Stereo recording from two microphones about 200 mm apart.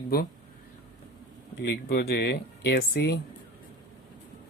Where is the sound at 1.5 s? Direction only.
55° left (ahead or behind).